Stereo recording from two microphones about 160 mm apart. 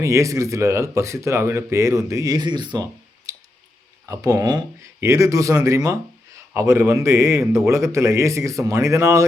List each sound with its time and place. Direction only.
0.0 s speech: 20° right (ahead or behind)
4.1 s speech: 20° right (ahead or behind)